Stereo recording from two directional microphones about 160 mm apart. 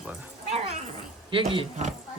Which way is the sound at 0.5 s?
45° right (ahead or behind).